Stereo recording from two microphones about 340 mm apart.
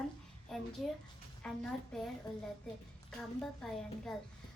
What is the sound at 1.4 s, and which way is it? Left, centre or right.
Speech, centre.